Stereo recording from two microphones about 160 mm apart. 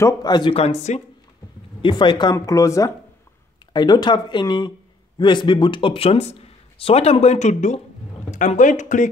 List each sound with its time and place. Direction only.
0.0 s speech: 25° left (ahead or behind); by 1.0 s 45° left (ahead or behind)
1.8 s speech: 30° left (ahead or behind); by 9.1 s 50° left (ahead or behind)